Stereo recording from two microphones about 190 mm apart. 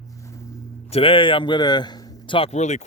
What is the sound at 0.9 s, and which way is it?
Speech, 30° left (ahead or behind).